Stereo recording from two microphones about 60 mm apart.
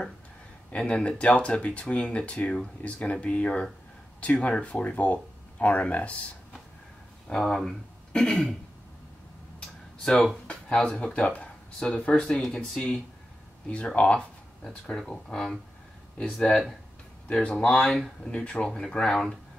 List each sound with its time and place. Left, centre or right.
0.7 s speech: centre
7.2 s speech: centre
10.0 s speech: centre
10.4 s a sound: centre
11.1 s speech: left; by 16.6 s centre
17.3 s speech: centre
17.6 s speech: centre